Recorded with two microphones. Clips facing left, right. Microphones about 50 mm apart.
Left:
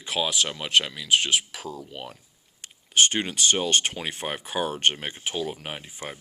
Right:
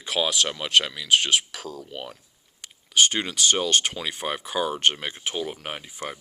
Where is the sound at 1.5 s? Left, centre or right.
Centre.